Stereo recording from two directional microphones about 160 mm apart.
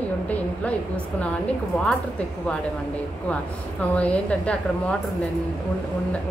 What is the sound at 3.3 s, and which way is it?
A woman's voice, 10° left (ahead or behind).